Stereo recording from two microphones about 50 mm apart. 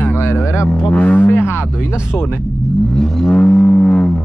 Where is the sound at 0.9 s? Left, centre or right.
Left.